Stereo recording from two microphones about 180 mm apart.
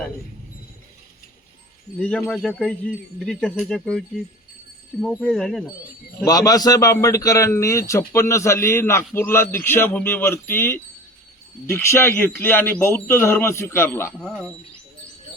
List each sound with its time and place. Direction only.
2.0 s speech: 5° left (ahead or behind)
6.2 s a man's voice: 20° left (ahead or behind); by 14.5 s 5° left (ahead or behind)